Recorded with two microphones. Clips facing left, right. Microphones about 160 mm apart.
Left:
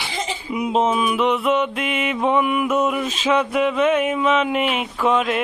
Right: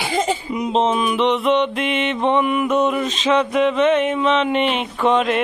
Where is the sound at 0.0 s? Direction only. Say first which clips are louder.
Right 7 dB; 50° right (ahead or behind).